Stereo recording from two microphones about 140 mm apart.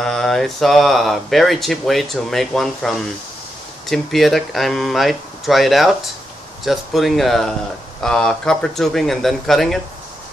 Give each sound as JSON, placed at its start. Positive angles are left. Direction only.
{"t": 0.0, "sound": "speech", "side_deg": 5}